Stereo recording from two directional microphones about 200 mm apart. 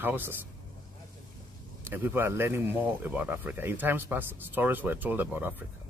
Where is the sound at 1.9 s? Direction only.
10° right (ahead or behind).